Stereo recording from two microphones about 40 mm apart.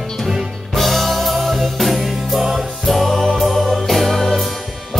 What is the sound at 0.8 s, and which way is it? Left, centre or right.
Music, centre.